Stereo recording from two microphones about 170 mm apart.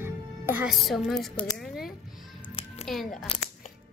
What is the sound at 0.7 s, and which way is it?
Speech, centre (ahead or behind).